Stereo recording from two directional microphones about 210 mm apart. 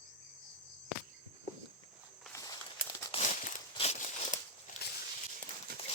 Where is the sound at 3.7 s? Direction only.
30° left (ahead or behind).